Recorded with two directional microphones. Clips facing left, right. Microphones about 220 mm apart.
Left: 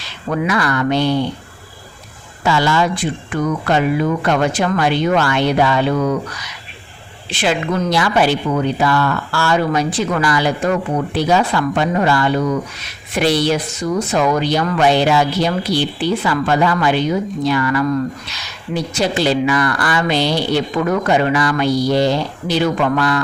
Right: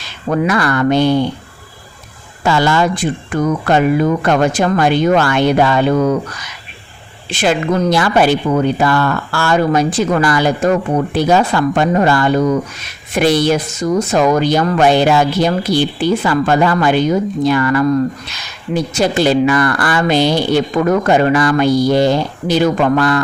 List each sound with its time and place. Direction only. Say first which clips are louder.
0.3 s speech: right 3 dB; 50° right (ahead or behind)
2.4 s speech: right 2 dB; 50° right (ahead or behind)
7.3 s speech: right 3 dB; 45° right (ahead or behind)